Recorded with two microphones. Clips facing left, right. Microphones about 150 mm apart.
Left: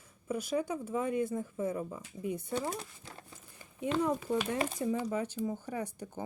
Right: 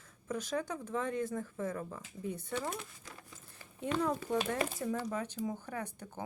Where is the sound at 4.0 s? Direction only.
10° left (ahead or behind).